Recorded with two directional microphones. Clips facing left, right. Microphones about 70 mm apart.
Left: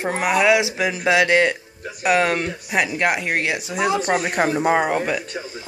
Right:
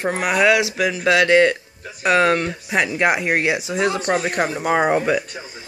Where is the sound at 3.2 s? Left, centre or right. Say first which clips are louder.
Right 3 dB; centre.